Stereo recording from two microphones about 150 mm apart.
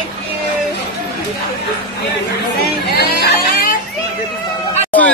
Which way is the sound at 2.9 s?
90° left.